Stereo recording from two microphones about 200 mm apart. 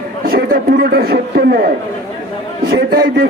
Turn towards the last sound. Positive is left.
turn(degrees=-50)  # may be behind; listen again after turning